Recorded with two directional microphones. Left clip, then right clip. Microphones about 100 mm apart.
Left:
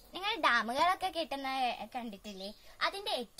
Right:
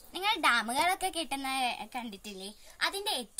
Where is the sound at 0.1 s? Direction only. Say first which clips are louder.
Right 3 dB; 15° left (ahead or behind).